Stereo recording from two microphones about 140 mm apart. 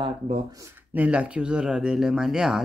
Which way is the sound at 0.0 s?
35° right (ahead or behind).